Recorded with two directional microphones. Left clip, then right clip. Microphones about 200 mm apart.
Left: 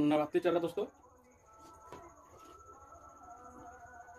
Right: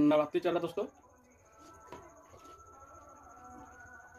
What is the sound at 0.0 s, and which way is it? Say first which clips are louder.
Speech: right 2 dB; centre (ahead or behind).